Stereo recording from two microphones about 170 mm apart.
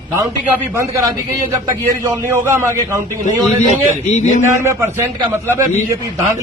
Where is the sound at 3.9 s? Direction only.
45° left (ahead or behind).